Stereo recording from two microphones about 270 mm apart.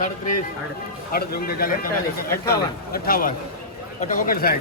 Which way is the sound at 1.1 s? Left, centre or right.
Left.